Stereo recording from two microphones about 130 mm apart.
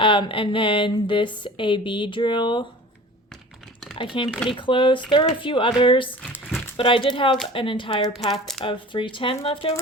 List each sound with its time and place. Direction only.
0.0 s speech: 40° left (ahead or behind)
3.9 s speech: 40° left (ahead or behind)
8.3 s speech: 5° left (ahead or behind)
8.6 s speech: 40° left (ahead or behind)